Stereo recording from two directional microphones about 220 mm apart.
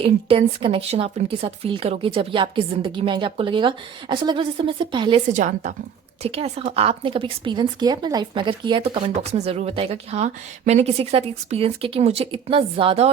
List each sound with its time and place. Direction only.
0.0 s speech: 25° right (ahead or behind)
5.3 s a woman's voice: 35° right (ahead or behind)